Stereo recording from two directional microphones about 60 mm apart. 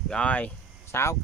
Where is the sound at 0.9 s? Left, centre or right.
Left.